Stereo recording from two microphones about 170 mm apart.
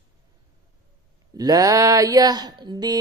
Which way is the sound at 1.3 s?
20° right (ahead or behind).